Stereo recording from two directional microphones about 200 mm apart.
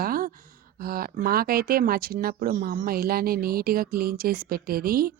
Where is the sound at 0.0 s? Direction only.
45° right (ahead or behind).